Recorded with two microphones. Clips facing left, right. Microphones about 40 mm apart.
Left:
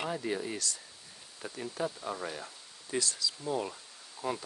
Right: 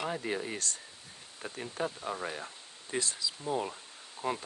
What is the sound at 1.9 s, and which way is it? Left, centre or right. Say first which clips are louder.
Speech: right 1 dB; right.